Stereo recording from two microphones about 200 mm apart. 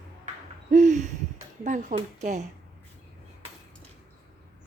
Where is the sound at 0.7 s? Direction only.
35° right (ahead or behind).